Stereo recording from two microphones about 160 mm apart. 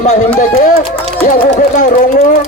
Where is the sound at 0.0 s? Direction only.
50° left (ahead or behind).